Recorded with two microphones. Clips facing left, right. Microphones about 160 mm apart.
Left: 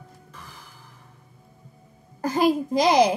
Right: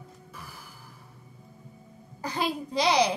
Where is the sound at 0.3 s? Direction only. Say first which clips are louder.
Even; 10° right (ahead or behind).